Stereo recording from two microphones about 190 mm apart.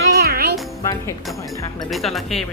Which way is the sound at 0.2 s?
55° right (ahead or behind).